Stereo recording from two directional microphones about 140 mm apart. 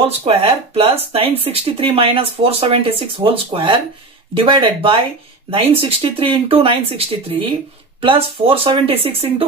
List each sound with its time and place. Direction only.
0.0 s speech: 45° right (ahead or behind)